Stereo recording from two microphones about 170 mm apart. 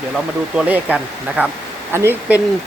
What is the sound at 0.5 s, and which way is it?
Speech, 10° right (ahead or behind).